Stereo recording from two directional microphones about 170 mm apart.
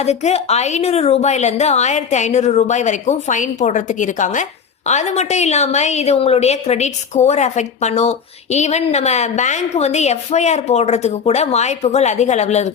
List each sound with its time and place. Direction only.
0.0 s a woman's voice: 40° left (ahead or behind)